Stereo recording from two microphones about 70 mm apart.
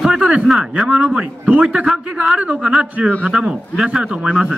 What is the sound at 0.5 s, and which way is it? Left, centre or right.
A man's voice, centre.